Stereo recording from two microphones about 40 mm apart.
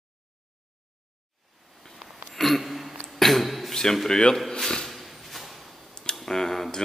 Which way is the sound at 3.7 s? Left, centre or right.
Centre.